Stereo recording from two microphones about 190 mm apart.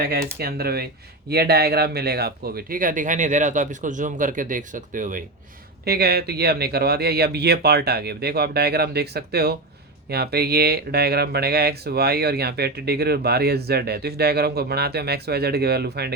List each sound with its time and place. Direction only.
0.0 s speech: 55° right (ahead or behind)
5.8 s speech: 55° right (ahead or behind)